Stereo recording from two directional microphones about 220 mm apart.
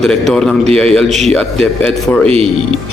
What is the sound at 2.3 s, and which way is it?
Speech, 25° right (ahead or behind).